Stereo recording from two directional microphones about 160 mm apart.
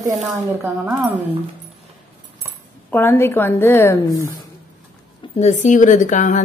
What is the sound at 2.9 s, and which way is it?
A woman's voice, 15° left (ahead or behind).